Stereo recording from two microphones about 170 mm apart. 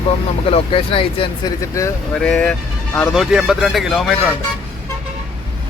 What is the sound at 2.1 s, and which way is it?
Speech, 5° left (ahead or behind).